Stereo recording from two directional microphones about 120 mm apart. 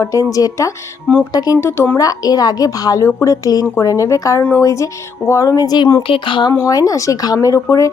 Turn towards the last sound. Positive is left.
turn(degrees=25)  # may be behind; listen again after turning